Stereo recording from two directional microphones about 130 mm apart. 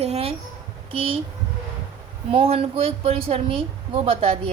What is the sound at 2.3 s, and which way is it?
A woman's voice, 45° right (ahead or behind).